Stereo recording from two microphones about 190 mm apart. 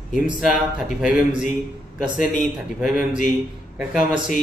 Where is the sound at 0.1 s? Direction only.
5° right (ahead or behind).